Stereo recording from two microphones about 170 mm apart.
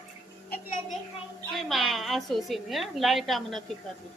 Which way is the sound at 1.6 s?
Centre (ahead or behind).